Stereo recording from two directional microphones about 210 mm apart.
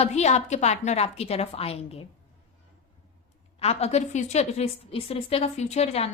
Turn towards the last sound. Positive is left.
turn(degrees=30)  # may be behind; listen again after turning